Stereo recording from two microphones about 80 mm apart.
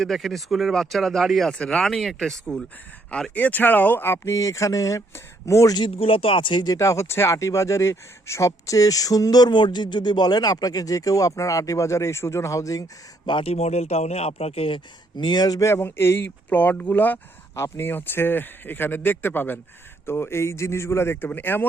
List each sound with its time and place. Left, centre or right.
0.0 s speech: centre
3.3 s speech: left
4.2 s speech: left
5.7 s speech: left
6.7 s speech: left
15.2 s speech: left
15.6 s speech: left
17.5 s a man's voice: left